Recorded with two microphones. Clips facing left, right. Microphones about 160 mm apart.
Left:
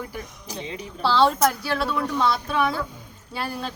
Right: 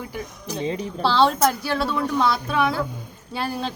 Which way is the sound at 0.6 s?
40° right (ahead or behind).